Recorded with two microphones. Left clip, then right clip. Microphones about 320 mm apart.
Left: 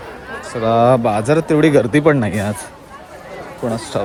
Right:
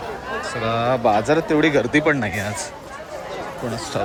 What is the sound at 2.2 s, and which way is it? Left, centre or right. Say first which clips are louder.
Speech: left 4 dB; left.